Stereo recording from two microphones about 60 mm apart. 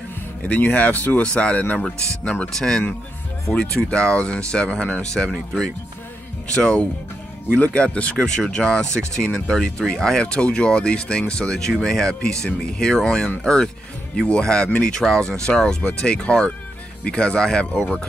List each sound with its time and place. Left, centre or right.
0.4 s speech: left
5.1 s speech: centre